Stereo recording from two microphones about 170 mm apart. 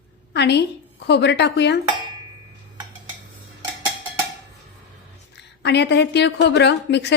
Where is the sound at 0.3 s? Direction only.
80° left.